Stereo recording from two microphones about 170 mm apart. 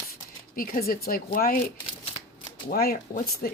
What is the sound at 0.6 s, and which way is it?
A woman's voice, 55° left (ahead or behind).